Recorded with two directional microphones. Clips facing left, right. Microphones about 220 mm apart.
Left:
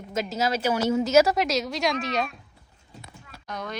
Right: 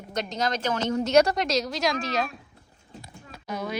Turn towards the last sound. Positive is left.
turn(degrees=-5)  # may be behind; listen again after turning